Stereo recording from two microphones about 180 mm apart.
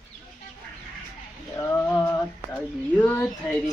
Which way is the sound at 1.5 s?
10° left (ahead or behind).